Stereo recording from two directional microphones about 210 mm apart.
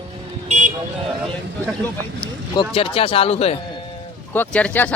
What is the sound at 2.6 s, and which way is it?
Speech, 25° left (ahead or behind).